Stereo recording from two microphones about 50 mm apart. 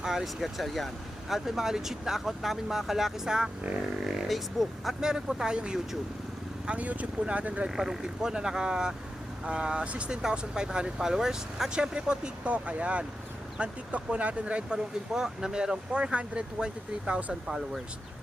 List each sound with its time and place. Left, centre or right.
0.0 s speech: centre
4.9 s speech: centre
6.7 s speech: right
7.7 s speech: centre; by 10.2 s right
10.2 s speech: centre
15.1 s speech: centre